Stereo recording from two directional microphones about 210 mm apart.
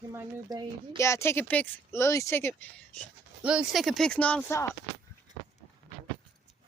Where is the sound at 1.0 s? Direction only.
10° left (ahead or behind).